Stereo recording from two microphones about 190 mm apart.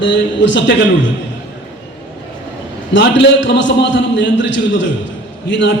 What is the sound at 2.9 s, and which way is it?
A man's voice, 70° left (ahead or behind).